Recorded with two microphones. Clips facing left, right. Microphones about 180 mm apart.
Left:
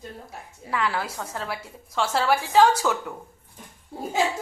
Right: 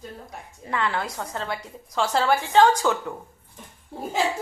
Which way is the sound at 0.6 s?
5° left (ahead or behind).